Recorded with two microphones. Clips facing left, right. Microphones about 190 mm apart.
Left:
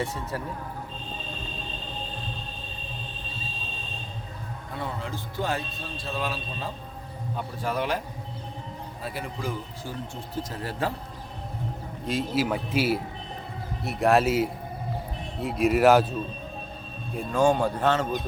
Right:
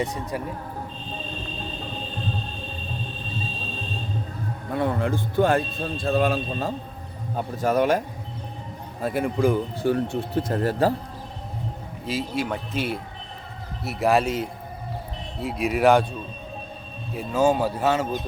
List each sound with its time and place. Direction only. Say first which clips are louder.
0.0 s speech: right 3 dB; 15° right (ahead or behind)
4.7 s a man's voice: right 10 dB; 55° right (ahead or behind); by 10.9 s 40° right (ahead or behind)
12.0 s speech: left 1 dB; centre (ahead or behind)
17.2 s speech: right 1 dB; 5° right (ahead or behind)